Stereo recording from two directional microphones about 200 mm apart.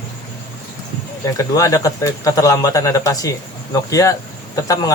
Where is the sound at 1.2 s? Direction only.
15° left (ahead or behind).